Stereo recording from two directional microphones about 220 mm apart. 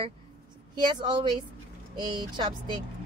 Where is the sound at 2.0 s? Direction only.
20° right (ahead or behind).